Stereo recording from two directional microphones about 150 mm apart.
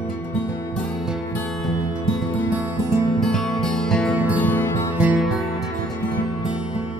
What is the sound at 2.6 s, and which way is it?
Music, 20° right (ahead or behind).